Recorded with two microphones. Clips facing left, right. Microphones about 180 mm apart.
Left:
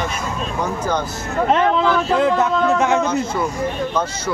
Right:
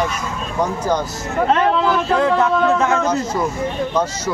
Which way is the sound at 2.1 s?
20° left (ahead or behind).